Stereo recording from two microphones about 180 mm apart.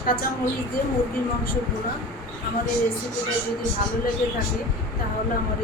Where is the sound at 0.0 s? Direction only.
50° left (ahead or behind).